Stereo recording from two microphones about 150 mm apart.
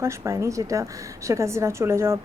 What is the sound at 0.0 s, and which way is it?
A woman's voice, 20° right (ahead or behind).